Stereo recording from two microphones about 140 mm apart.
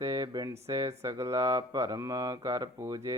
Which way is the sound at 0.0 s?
25° right (ahead or behind).